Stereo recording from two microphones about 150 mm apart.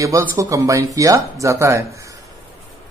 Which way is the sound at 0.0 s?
20° right (ahead or behind).